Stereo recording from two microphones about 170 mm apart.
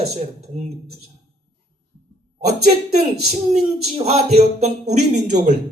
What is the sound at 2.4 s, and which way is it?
Speech, 40° right (ahead or behind).